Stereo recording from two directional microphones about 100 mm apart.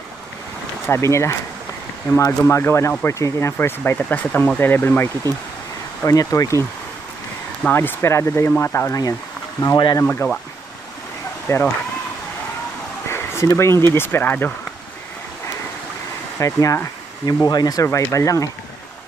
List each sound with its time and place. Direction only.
0.8 s speech: 25° left (ahead or behind)
6.0 s speech: 35° left (ahead or behind)
7.7 s speech: 20° left (ahead or behind)
9.6 s speech: 45° left (ahead or behind)
10.0 s speech: 20° left (ahead or behind)
11.5 s speech: 30° left (ahead or behind)
13.1 s speech: 25° left (ahead or behind)
16.3 s speech: 30° left (ahead or behind)